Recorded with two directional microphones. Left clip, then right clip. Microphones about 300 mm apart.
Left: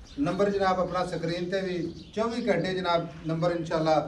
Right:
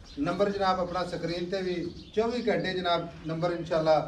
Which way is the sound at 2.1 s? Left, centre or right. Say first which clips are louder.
Even; left.